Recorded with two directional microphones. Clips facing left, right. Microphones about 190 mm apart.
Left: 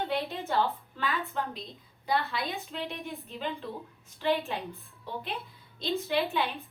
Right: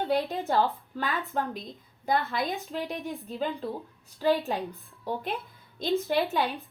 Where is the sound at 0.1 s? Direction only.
35° right (ahead or behind).